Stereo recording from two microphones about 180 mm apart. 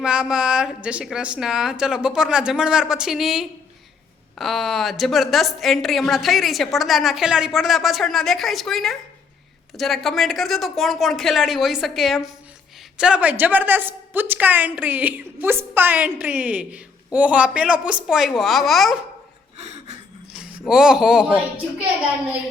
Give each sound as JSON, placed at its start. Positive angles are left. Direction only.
{"t": 0.0, "sound": "a woman's voice", "side_deg": -5}
{"t": 19.5, "sound": "a sound", "side_deg": -40}
{"t": 20.3, "sound": "speech", "side_deg": -5}